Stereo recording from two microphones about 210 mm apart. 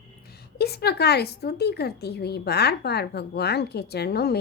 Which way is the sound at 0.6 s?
50° left (ahead or behind).